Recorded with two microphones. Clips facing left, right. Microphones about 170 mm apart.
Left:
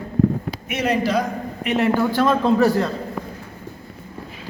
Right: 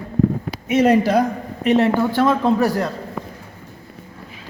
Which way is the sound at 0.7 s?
50° right (ahead or behind).